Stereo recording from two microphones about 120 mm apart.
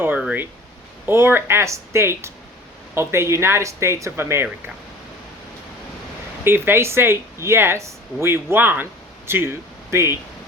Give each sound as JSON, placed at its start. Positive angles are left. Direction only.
{"t": 0.0, "sound": "speech", "side_deg": -10}
{"t": 6.4, "sound": "speech", "side_deg": -20}